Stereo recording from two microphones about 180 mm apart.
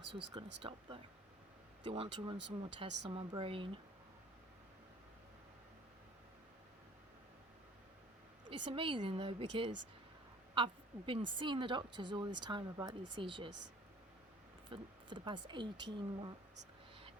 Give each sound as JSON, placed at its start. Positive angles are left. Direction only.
{"t": 0.4, "sound": "speech", "side_deg": -30}
{"t": 1.8, "sound": "speech", "side_deg": -30}
{"t": 2.4, "sound": "speech", "side_deg": -75}
{"t": 3.1, "sound": "speech", "side_deg": -30}
{"t": 8.4, "sound": "a woman's voice", "side_deg": -30}
{"t": 14.7, "sound": "speech", "side_deg": -30}